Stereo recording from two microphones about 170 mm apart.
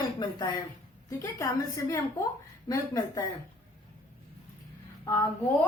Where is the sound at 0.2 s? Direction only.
25° left (ahead or behind).